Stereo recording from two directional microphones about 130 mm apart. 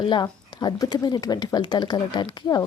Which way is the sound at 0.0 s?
35° left (ahead or behind).